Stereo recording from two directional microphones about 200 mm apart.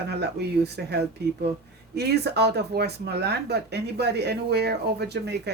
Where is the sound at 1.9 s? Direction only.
55° right (ahead or behind).